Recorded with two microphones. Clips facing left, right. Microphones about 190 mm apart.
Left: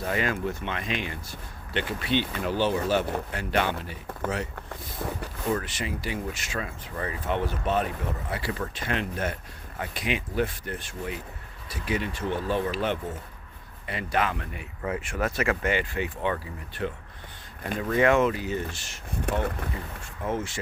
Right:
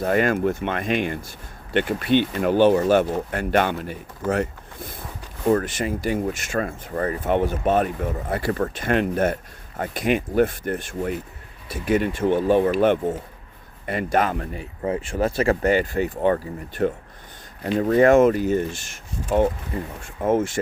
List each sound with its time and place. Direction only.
0.0 s speech: 50° right (ahead or behind)
5.5 s speech: 45° right (ahead or behind)